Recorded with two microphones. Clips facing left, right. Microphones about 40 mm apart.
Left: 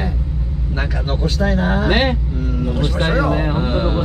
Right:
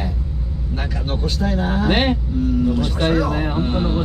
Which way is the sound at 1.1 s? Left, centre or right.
Centre.